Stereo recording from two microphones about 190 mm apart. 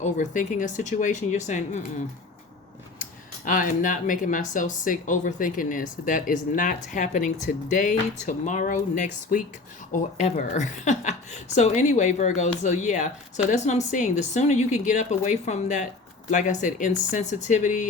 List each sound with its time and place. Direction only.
0.0 s a woman's voice: 40° left (ahead or behind)
3.0 s a woman's voice: 45° left (ahead or behind)